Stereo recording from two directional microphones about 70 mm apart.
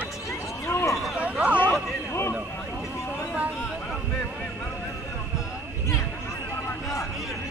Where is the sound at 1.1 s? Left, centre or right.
Centre.